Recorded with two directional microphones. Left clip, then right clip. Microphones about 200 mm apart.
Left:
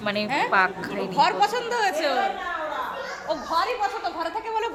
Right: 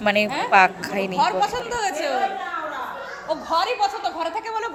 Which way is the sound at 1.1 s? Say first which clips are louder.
Left 1 dB; 15° left (ahead or behind).